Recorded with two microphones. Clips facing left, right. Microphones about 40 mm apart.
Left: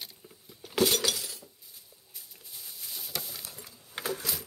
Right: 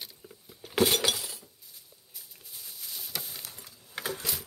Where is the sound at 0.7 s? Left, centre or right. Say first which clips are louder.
Right 1 dB; centre.